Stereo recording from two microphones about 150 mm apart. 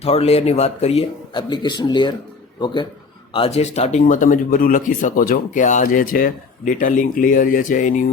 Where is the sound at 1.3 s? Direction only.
30° left (ahead or behind).